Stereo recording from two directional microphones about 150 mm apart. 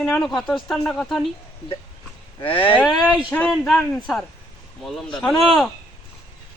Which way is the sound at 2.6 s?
10° left (ahead or behind).